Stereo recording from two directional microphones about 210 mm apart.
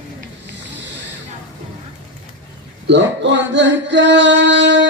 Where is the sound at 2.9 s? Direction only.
60° right (ahead or behind).